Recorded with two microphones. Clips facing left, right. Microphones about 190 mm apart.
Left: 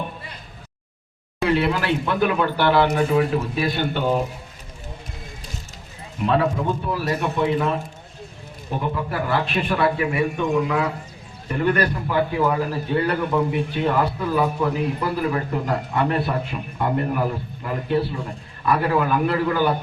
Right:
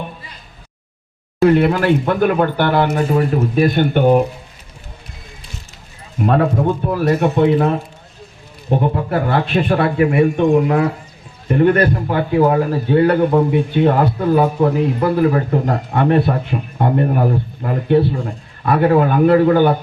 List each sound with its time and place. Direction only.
1.5 s speech: 50° right (ahead or behind)
6.1 s speech: 50° right (ahead or behind)
8.8 s speech: 45° right (ahead or behind)
9.5 s a man's voice: 35° right (ahead or behind)
9.8 s a man's voice: 45° right (ahead or behind)
16.3 s a man's voice: 35° right (ahead or behind)